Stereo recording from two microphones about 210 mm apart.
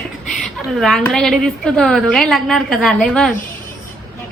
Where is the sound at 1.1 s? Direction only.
Centre (ahead or behind).